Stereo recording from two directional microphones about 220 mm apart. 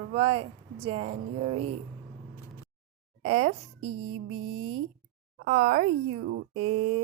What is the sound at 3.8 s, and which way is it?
Speech, 75° right (ahead or behind).